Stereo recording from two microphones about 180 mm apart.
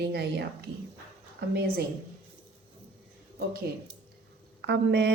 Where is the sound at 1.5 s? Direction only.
60° right (ahead or behind).